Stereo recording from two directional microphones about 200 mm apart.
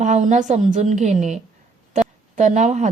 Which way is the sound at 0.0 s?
35° right (ahead or behind).